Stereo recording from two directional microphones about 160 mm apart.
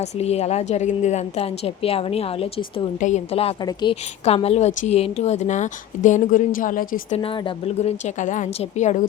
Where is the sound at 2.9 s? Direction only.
50° left (ahead or behind).